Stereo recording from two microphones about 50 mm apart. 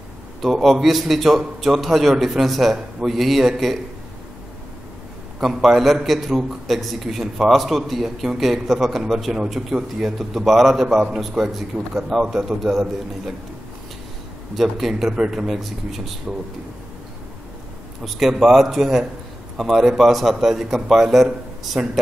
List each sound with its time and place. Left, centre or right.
0.4 s a man's voice: centre
5.4 s a man's voice: centre
11.4 s a man's voice: right
11.9 s a man's voice: centre
14.5 s a man's voice: centre
15.1 s a man's voice: centre
15.4 s a man's voice: centre
18.0 s a man's voice: centre
21.8 s speech: right